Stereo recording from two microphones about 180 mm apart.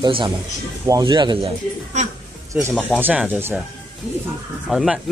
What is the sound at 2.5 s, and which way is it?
Speech, 10° right (ahead or behind).